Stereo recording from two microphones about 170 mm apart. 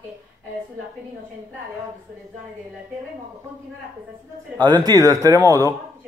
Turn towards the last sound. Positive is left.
turn(degrees=-20)  # may be behind; listen again after turning